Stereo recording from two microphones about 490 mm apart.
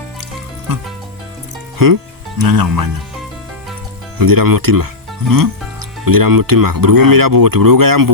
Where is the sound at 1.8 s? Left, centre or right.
Right.